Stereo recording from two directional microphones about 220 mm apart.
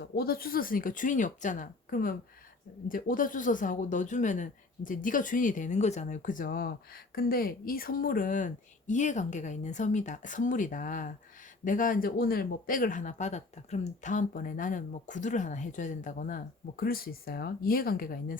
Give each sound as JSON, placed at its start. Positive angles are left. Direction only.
{"t": 0.0, "sound": "speech", "side_deg": 45}